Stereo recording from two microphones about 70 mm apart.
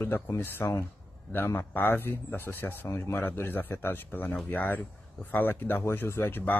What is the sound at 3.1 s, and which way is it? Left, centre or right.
Speech, left.